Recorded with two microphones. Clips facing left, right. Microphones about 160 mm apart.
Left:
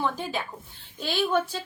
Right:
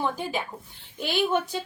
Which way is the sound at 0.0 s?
15° right (ahead or behind).